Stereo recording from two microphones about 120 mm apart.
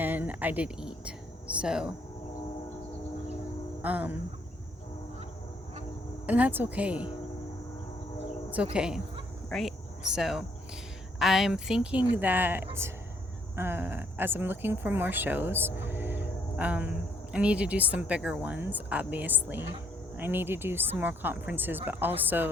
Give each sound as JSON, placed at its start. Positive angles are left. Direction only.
{"t": 0.0, "sound": "speech", "side_deg": -15}
{"t": 3.8, "sound": "speech", "side_deg": -15}
{"t": 6.2, "sound": "speech", "side_deg": -15}
{"t": 8.7, "sound": "speech", "side_deg": -5}